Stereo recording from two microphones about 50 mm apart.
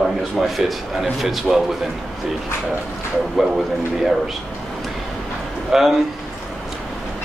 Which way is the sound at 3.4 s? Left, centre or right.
Centre.